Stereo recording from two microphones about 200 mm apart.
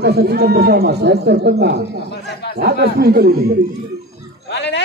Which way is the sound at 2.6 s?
50° right (ahead or behind).